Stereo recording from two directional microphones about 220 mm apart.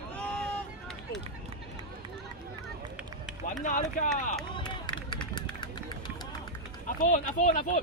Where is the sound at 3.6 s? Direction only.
35° left (ahead or behind).